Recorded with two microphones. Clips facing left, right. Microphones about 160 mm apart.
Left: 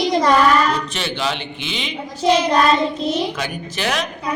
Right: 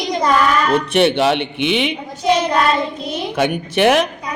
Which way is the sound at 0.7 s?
60° right (ahead or behind).